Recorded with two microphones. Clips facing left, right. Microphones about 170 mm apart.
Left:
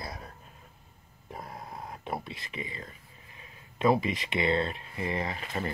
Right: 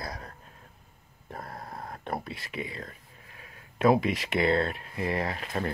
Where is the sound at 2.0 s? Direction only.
Centre (ahead or behind).